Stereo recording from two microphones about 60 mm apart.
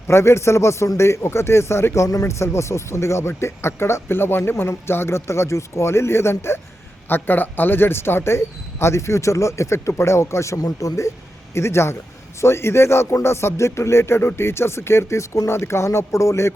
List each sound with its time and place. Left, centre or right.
0.1 s speech: left
7.1 s speech: left
11.5 s speech: left